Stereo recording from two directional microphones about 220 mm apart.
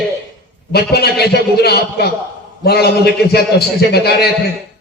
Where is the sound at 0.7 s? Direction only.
45° left (ahead or behind).